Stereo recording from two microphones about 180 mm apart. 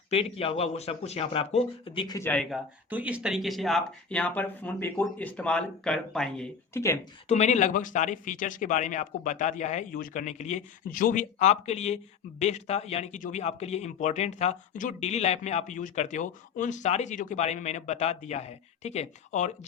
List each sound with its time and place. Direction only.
0.1 s speech: 35° left (ahead or behind)
2.1 s speech: 10° left (ahead or behind)
2.5 s speech: 10° right (ahead or behind)
6.7 s speech: 15° left (ahead or behind)
7.3 s speech: 40° left (ahead or behind)